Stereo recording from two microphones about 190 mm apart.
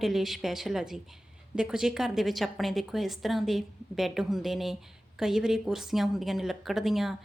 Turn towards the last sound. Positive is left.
turn(degrees=0)  # may be behind; listen again after turning